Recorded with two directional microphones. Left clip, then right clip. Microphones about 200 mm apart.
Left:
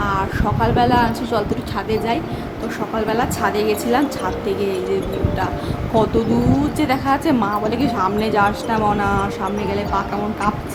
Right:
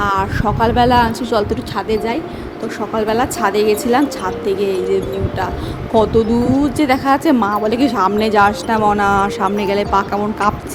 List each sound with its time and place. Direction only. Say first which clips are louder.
0.0 s speech: right 4 dB; 35° right (ahead or behind)
2.9 s speech: right 4 dB; 30° right (ahead or behind)
5.9 s speech: right 4 dB; 25° right (ahead or behind); by 10.5 s 40° right (ahead or behind)